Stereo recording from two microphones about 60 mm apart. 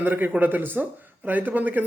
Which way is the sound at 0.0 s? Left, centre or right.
Right.